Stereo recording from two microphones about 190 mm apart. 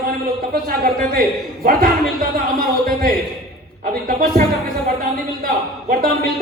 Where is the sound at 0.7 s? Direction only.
50° right (ahead or behind).